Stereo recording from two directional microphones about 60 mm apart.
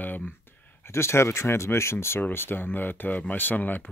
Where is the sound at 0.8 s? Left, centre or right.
Left.